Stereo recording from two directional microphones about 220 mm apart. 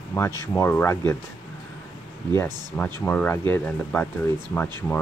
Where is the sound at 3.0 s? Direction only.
10° left (ahead or behind).